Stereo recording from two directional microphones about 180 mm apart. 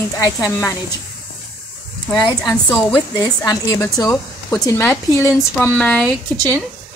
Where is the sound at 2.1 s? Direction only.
20° left (ahead or behind); by 6.1 s 5° left (ahead or behind).